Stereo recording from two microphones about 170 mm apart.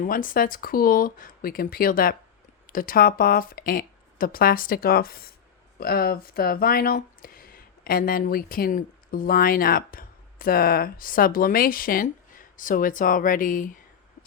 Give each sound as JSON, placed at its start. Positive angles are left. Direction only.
{"t": 0.0, "sound": "speech", "side_deg": 55}